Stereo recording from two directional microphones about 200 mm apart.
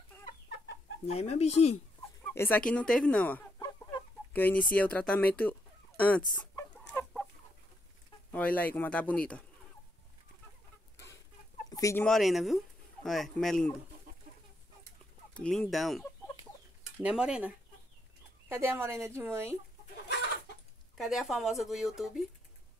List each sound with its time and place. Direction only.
1.0 s speech: 30° left (ahead or behind)
2.3 s speech: 10° left (ahead or behind)
3.5 s chicken: 20° left (ahead or behind)
8.3 s speech: 5° left (ahead or behind)
11.7 s speech: 15° left (ahead or behind)
12.1 s speech: centre (ahead or behind)
15.3 s speech: 5° left (ahead or behind)
17.0 s speech: 5° right (ahead or behind)
21.0 s speech: centre (ahead or behind)